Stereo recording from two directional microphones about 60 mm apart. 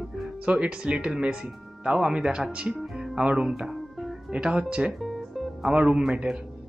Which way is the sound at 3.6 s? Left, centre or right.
Centre.